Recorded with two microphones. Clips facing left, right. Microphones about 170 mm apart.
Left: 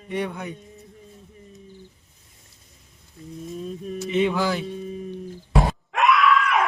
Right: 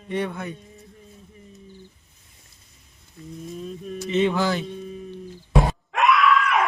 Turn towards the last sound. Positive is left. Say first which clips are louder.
# even
turn(degrees=0)  # may be behind; listen again after turning